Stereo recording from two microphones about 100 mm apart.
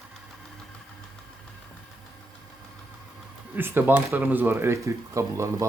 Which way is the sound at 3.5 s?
20° right (ahead or behind).